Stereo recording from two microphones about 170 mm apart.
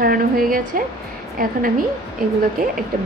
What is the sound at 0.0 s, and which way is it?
Speech, 60° right (ahead or behind).